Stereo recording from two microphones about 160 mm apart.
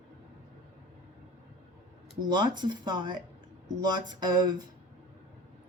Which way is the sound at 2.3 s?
25° right (ahead or behind).